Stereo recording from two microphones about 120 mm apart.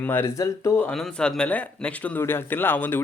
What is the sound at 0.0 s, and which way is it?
Speech, 15° left (ahead or behind).